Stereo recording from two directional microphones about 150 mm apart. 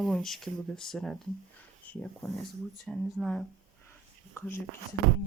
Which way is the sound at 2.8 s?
5° left (ahead or behind).